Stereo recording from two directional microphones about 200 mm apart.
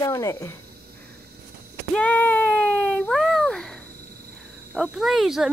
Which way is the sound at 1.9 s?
5° left (ahead or behind).